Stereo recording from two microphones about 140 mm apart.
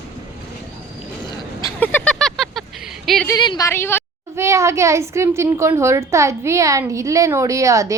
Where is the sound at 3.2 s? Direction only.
30° left (ahead or behind).